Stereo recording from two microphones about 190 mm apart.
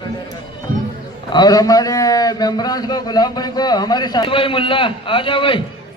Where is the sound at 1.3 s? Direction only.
20° left (ahead or behind).